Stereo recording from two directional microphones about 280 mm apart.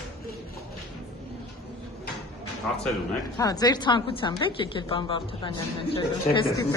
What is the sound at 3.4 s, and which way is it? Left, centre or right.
A woman's voice, centre.